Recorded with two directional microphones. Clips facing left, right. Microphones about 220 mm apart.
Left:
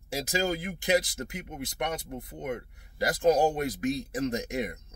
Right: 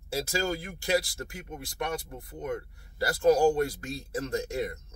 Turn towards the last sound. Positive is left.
turn(degrees=15)  # may be behind; listen again after turning